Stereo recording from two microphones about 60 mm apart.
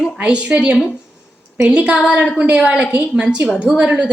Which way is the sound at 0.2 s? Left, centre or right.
Right.